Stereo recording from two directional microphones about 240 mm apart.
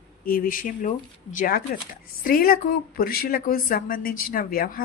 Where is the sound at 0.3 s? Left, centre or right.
Left.